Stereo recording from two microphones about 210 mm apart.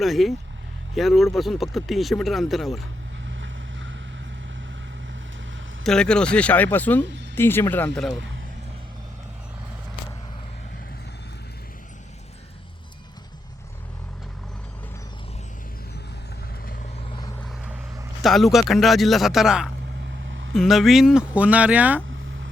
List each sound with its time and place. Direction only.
0.0 s speech: centre (ahead or behind)
3.2 s vehicle: 65° right (ahead or behind)
5.8 s speech: 5° left (ahead or behind)
18.2 s speech: centre (ahead or behind)